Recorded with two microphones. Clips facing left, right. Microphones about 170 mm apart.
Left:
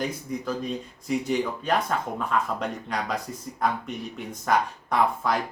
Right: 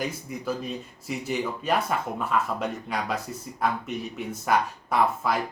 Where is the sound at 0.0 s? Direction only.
10° right (ahead or behind).